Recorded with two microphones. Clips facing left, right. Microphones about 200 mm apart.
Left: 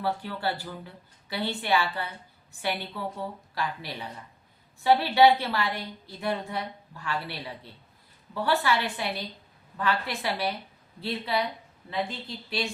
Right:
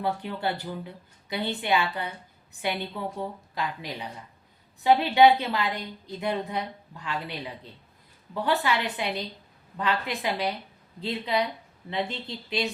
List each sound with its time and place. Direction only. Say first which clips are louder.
0.0 s a woman's voice: right 1 dB; 20° right (ahead or behind)
8.4 s a woman's voice: even; 20° right (ahead or behind)